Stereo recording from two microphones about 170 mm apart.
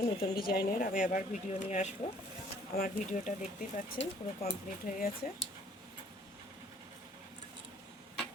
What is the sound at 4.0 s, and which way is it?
Speech, 90° left.